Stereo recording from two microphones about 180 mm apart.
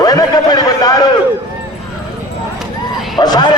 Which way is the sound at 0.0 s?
20° left (ahead or behind).